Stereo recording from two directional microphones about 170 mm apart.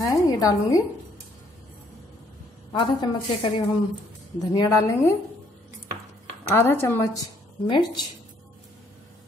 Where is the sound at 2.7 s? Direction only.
25° left (ahead or behind).